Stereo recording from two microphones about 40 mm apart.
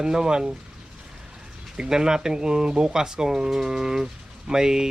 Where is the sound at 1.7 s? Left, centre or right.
Centre.